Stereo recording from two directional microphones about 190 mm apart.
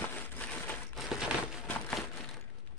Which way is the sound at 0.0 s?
10° left (ahead or behind).